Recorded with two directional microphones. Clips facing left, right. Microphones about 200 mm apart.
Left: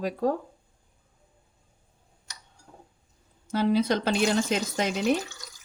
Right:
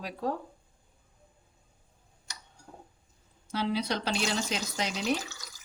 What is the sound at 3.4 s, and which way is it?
Speech, 50° left (ahead or behind).